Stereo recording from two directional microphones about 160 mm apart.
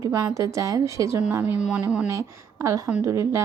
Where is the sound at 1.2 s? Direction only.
10° right (ahead or behind).